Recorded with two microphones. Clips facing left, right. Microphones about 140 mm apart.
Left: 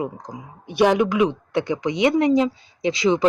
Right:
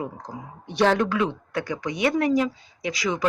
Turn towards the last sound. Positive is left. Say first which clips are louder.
# left 7 dB
turn(degrees=25)  # may be behind; listen again after turning